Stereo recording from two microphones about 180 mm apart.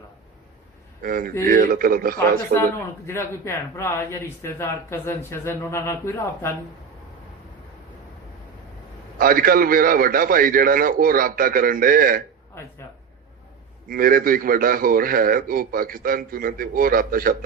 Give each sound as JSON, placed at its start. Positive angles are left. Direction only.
{"t": 1.0, "sound": "a man's voice", "side_deg": -50}
{"t": 2.6, "sound": "speech", "side_deg": 15}
{"t": 9.1, "sound": "a man's voice", "side_deg": -55}
{"t": 12.6, "sound": "speech", "side_deg": 15}
{"t": 13.8, "sound": "a man's voice", "side_deg": -55}